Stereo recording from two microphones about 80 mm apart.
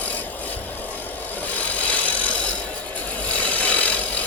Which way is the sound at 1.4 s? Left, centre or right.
Centre.